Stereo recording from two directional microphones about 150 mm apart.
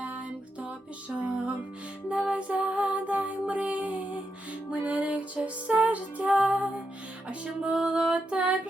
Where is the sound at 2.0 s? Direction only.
5° right (ahead or behind).